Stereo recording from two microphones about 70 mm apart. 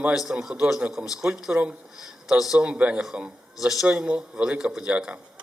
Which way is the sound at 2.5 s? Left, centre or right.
Centre.